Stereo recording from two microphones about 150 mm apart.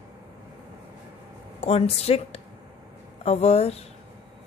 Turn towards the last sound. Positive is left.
turn(degrees=45)  # may be behind; listen again after turning